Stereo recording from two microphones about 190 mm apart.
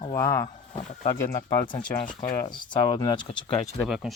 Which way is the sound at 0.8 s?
40° left (ahead or behind).